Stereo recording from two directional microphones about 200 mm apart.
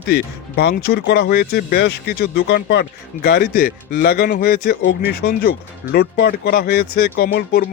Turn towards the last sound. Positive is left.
turn(degrees=50)  # may be behind; listen again after turning